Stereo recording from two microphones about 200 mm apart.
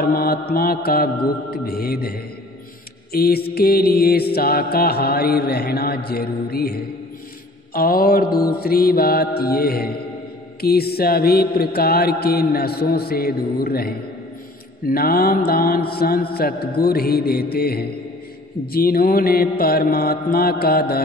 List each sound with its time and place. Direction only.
0.0 s mantra: 50° left (ahead or behind)